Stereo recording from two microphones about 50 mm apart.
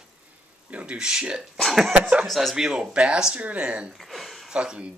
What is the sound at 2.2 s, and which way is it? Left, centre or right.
Speech, centre.